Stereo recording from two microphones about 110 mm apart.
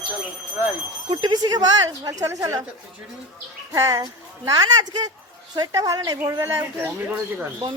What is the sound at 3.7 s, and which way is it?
Speech, 35° right (ahead or behind).